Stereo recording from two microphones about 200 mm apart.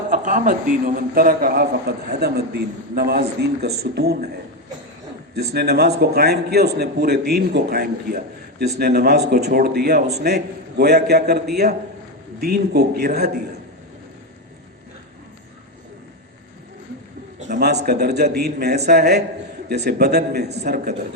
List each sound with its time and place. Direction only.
0.1 s a man's voice: 40° right (ahead or behind)
5.3 s a man's voice: 55° right (ahead or behind)
17.5 s a man's voice: 55° right (ahead or behind)